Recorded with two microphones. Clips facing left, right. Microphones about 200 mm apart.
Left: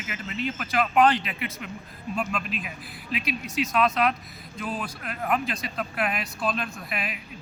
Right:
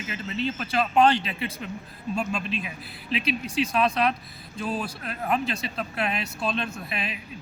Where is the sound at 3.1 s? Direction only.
30° right (ahead or behind).